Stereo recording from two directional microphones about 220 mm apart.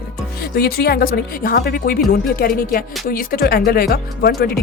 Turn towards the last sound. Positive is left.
turn(degrees=45)  # may be behind; listen again after turning